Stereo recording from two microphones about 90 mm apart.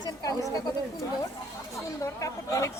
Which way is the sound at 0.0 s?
45° left (ahead or behind).